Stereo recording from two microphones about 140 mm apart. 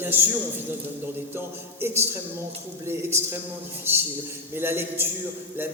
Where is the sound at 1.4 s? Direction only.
15° right (ahead or behind).